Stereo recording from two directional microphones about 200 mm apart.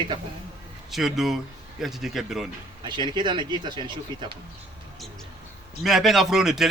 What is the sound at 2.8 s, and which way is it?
Speech, 25° right (ahead or behind).